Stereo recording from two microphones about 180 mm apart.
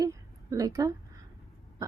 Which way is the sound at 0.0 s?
20° right (ahead or behind).